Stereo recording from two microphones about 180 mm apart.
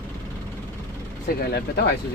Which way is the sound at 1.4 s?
60° left (ahead or behind).